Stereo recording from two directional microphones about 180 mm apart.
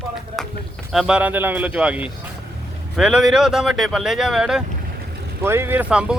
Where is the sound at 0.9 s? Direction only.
5° right (ahead or behind).